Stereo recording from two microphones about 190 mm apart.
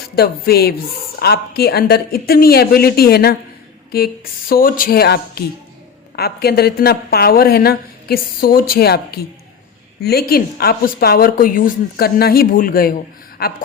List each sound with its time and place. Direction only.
0.2 s a woman's voice: 55° left (ahead or behind)